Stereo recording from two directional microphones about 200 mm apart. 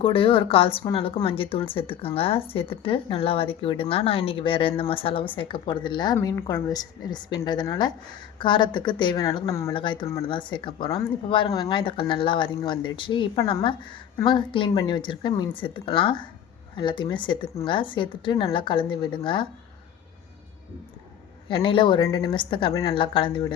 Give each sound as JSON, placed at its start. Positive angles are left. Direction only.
{"t": 0.0, "sound": "speech", "side_deg": 25}
{"t": 21.5, "sound": "speech", "side_deg": 25}